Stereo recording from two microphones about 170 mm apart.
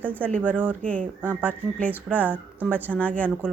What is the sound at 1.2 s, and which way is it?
Speech, 10° right (ahead or behind).